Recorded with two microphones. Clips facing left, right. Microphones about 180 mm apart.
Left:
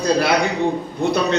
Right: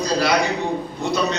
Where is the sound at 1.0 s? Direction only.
55° left (ahead or behind).